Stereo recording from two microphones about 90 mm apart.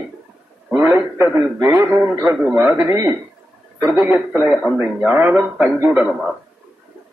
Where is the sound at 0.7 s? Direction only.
25° right (ahead or behind).